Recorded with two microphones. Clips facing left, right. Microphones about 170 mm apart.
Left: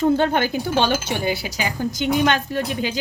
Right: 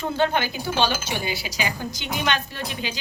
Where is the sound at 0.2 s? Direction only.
50° left (ahead or behind).